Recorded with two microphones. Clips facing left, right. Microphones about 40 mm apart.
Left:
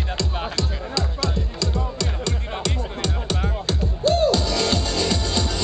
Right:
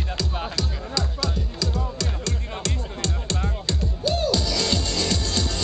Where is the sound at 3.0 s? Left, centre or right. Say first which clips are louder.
Left 2 dB; centre.